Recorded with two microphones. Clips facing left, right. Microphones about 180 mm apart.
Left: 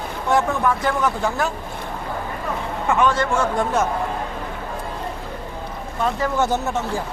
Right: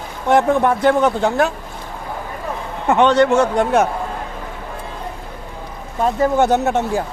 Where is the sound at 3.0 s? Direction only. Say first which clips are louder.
Right 6 dB; 70° right (ahead or behind).